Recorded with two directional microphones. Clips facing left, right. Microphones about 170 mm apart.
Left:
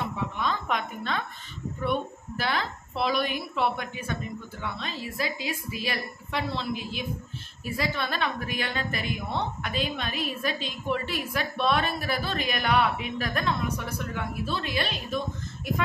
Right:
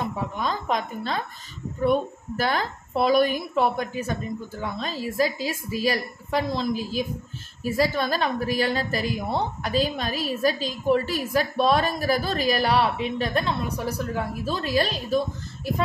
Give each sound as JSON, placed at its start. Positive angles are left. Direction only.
{"t": 0.0, "sound": "a woman's voice", "side_deg": -40}